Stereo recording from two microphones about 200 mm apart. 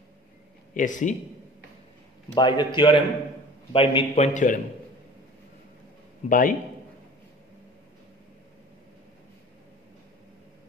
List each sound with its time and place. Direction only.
0.7 s a man's voice: 40° left (ahead or behind)
2.3 s a man's voice: 20° left (ahead or behind); by 4.6 s 40° left (ahead or behind)
6.2 s a man's voice: 45° left (ahead or behind)